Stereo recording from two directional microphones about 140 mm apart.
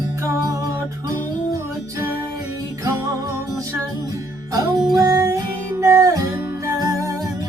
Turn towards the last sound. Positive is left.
turn(degrees=-25)  # may be behind; listen again after turning